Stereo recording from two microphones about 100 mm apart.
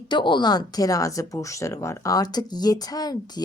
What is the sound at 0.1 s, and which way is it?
Speech, 55° left (ahead or behind).